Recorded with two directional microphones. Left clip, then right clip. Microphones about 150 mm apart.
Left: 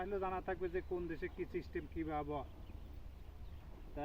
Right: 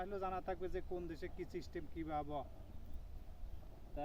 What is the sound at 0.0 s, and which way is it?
Speech, 35° right (ahead or behind).